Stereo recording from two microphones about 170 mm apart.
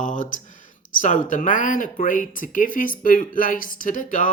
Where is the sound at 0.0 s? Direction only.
50° left (ahead or behind).